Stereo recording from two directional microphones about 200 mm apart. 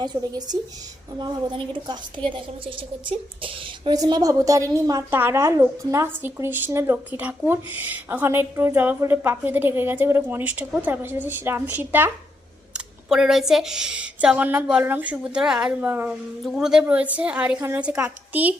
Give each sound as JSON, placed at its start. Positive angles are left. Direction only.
{"t": 0.0, "sound": "a woman's voice", "side_deg": -20}